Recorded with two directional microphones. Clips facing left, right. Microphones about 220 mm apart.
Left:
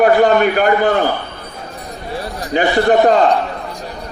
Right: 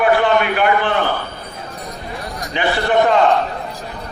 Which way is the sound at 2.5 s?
40° left (ahead or behind).